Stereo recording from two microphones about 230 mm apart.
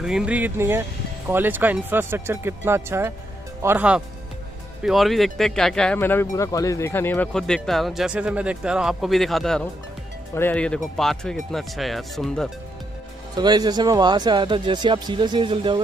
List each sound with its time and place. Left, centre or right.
0.0 s speech: centre
13.4 s speech: centre